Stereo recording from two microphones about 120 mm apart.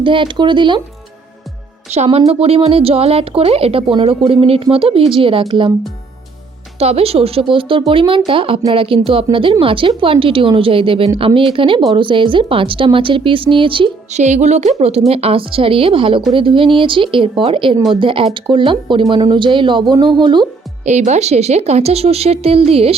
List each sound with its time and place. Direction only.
0.0 s speech: 45° right (ahead or behind)
2.0 s a woman's voice: 55° right (ahead or behind)
6.7 s a woman's voice: 55° right (ahead or behind)
14.1 s a woman's voice: 75° right (ahead or behind); by 20.5 s 40° right (ahead or behind)
20.8 s speech: 75° right (ahead or behind); by 23.0 s 55° right (ahead or behind)